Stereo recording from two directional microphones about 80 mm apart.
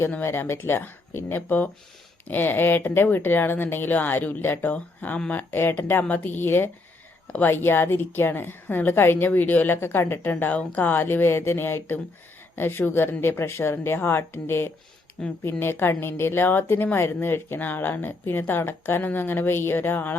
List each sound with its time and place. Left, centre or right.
0.1 s a woman's voice: left